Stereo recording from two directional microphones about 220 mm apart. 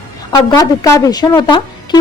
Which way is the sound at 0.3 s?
15° left (ahead or behind).